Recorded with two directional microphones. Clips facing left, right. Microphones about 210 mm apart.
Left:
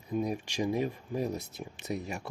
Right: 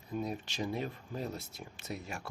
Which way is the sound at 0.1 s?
10° left (ahead or behind).